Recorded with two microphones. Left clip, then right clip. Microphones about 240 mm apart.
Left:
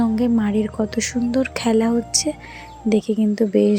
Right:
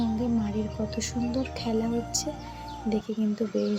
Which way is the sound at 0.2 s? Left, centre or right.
Left.